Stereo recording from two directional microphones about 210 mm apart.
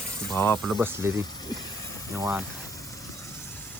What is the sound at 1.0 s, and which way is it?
Speech, 10° right (ahead or behind).